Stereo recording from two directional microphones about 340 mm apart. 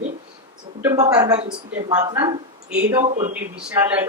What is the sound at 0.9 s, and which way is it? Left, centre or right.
A man's voice, centre.